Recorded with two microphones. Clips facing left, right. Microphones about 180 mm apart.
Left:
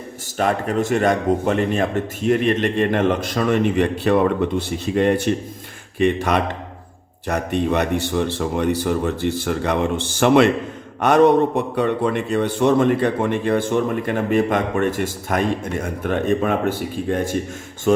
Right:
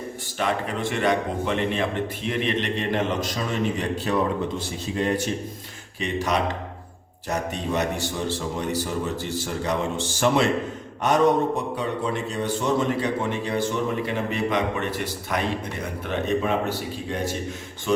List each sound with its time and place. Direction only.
0.3 s a man's voice: 45° left (ahead or behind)